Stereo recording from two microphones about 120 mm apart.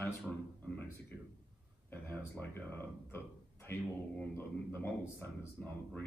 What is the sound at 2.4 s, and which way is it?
Speech, 20° left (ahead or behind).